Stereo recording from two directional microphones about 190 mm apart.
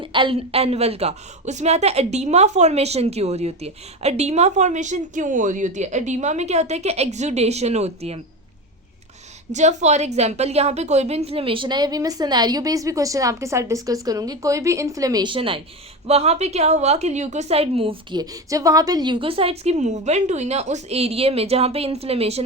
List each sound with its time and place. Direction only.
0.0 s a woman's voice: 25° right (ahead or behind)
9.5 s a woman's voice: 40° right (ahead or behind)